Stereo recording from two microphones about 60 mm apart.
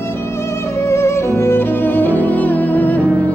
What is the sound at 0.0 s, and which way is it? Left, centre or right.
Music, left.